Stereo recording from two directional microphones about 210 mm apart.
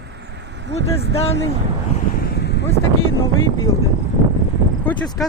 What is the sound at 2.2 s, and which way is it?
Vehicle, 55° left (ahead or behind).